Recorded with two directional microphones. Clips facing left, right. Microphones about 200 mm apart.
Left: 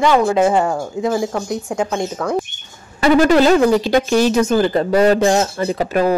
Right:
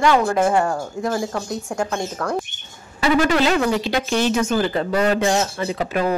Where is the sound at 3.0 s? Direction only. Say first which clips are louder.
Left 6 dB; 45° left (ahead or behind).